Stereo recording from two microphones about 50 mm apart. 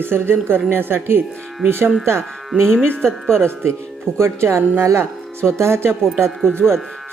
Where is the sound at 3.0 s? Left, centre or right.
Centre.